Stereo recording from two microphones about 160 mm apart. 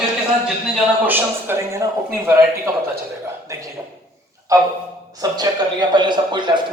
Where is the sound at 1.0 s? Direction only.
15° right (ahead or behind).